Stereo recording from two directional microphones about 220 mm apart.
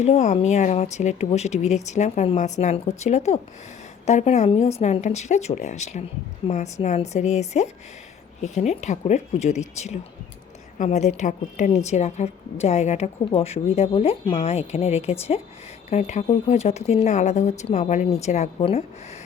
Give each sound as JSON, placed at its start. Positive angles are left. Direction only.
{"t": 0.0, "sound": "a woman's voice", "side_deg": 30}